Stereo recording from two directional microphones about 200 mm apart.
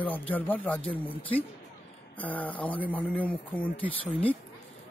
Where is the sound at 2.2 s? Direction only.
10° left (ahead or behind).